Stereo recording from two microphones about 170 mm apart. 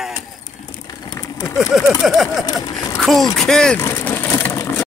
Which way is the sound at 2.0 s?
Centre (ahead or behind).